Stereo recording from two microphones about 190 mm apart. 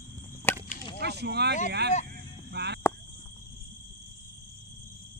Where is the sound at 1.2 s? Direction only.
60° right (ahead or behind).